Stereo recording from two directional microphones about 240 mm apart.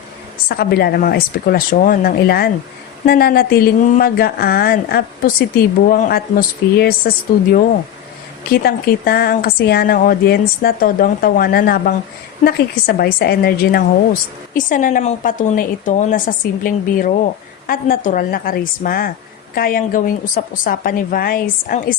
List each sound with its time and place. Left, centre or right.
0.4 s a woman's voice: left
8.6 s a woman's voice: left